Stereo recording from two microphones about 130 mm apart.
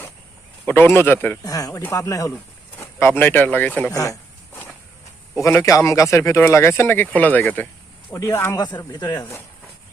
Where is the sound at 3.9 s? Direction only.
25° left (ahead or behind).